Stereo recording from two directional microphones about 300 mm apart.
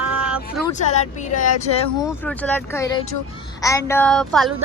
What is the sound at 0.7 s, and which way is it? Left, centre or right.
Speech, left.